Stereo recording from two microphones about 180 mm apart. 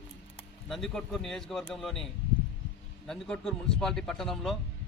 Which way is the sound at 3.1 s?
5° left (ahead or behind).